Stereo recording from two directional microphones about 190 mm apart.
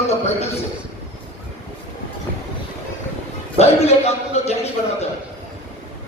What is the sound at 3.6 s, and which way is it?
A man's voice, 35° left (ahead or behind).